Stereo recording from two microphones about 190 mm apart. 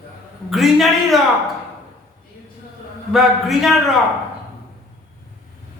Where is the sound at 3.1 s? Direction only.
Centre (ahead or behind).